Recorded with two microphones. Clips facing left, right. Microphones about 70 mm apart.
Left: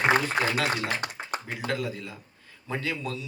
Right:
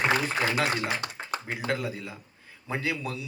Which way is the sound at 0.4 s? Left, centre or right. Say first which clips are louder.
Even; right.